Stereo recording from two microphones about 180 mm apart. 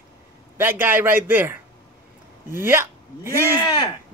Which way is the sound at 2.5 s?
10° right (ahead or behind).